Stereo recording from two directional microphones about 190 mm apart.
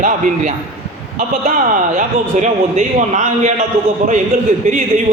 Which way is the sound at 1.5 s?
45° right (ahead or behind).